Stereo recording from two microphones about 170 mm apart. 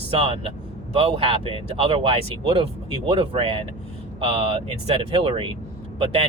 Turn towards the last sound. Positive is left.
turn(degrees=-30)  # may be behind; listen again after turning